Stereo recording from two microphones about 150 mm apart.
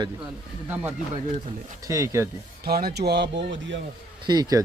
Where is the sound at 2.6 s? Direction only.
90° right.